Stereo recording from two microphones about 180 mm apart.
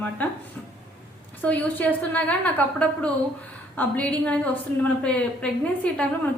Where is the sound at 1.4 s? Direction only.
10° left (ahead or behind).